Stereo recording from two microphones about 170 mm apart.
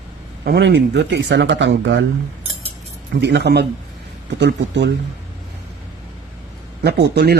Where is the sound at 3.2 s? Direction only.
85° right.